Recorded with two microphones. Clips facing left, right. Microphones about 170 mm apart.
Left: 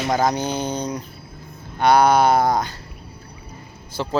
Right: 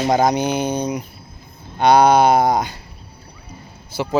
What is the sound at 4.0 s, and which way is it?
Speech, 10° right (ahead or behind).